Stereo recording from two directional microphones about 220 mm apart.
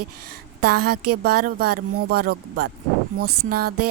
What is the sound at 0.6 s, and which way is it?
Speech, 45° right (ahead or behind).